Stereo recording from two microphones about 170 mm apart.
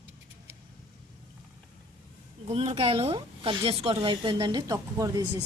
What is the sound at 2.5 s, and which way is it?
Speech, 35° right (ahead or behind).